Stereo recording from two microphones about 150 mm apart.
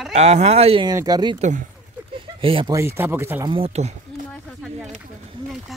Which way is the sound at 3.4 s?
40° right (ahead or behind).